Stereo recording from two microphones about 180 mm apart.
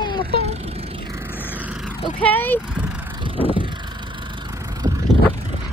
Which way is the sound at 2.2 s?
10° left (ahead or behind).